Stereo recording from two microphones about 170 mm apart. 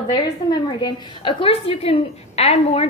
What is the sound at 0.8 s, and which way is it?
A woman's voice, 30° left (ahead or behind).